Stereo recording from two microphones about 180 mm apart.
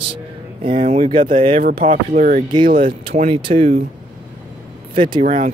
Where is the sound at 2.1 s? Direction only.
50° right (ahead or behind).